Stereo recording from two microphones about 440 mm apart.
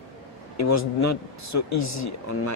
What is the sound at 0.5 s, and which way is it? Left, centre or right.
Speech, left.